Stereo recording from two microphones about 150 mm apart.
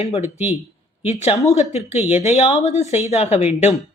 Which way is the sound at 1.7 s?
45° left (ahead or behind).